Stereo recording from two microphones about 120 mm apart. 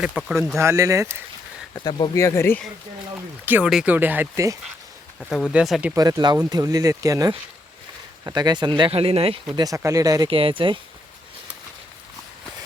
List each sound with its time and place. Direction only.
0.0 s speech: 5° right (ahead or behind)
0.3 s speech: 20° right (ahead or behind)
1.7 s speech: 40° left (ahead or behind)
2.1 s speech: 25° left (ahead or behind)
3.4 s speech: 15° right (ahead or behind)
5.5 s speech: 5° right (ahead or behind)
6.0 s speech: 35° right (ahead or behind)
8.9 s speech: 55° right (ahead or behind)
9.6 s speech: 30° right (ahead or behind)
10.2 s speech: 50° right (ahead or behind)